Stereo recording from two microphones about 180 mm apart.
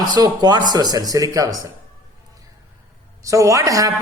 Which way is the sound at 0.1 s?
25° right (ahead or behind).